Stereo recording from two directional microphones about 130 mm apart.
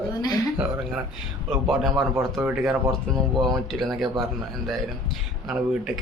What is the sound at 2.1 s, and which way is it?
Speech, 20° right (ahead or behind).